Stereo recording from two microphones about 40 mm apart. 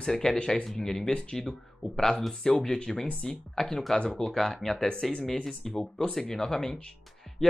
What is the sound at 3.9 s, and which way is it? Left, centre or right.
Speech, left.